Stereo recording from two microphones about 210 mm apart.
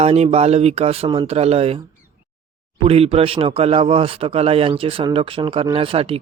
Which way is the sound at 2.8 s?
30° right (ahead or behind).